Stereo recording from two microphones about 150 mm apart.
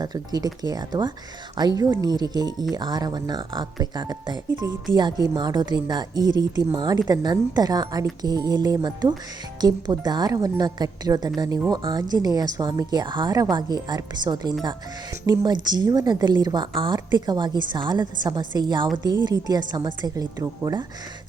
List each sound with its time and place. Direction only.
0.0 s speech: 25° right (ahead or behind)